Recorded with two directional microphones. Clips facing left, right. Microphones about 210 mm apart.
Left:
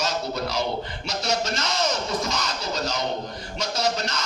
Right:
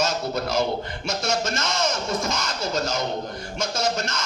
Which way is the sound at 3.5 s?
50° right (ahead or behind).